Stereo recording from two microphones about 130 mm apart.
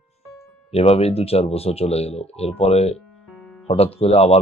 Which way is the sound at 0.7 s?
50° left (ahead or behind).